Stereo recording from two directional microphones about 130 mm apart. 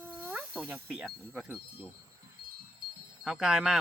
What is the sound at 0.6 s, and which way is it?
Speech, 10° right (ahead or behind).